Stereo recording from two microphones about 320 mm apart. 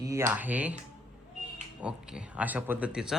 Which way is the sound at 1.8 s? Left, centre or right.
Centre.